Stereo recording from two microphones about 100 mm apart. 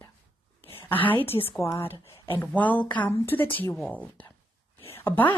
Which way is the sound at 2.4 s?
15° left (ahead or behind).